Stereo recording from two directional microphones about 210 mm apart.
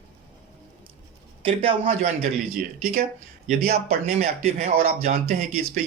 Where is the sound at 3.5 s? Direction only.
45° right (ahead or behind).